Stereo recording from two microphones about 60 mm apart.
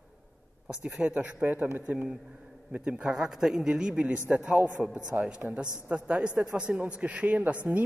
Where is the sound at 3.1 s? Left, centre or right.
Centre.